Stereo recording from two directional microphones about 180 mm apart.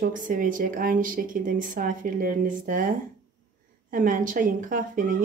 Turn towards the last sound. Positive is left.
turn(degrees=-50)  # may be behind; listen again after turning